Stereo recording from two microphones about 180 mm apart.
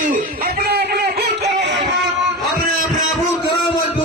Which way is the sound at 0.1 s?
60° right (ahead or behind).